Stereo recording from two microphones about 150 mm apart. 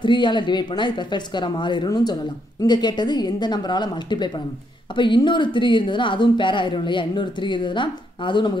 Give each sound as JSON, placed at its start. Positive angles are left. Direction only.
{"t": 0.0, "sound": "a woman's voice", "side_deg": 30}